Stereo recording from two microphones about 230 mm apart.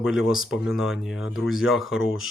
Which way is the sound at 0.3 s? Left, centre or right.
Centre.